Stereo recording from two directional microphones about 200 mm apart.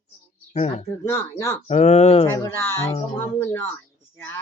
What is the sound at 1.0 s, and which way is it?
Speech, 15° left (ahead or behind).